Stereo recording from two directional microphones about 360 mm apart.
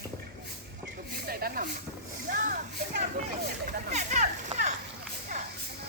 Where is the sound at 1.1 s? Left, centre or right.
Right.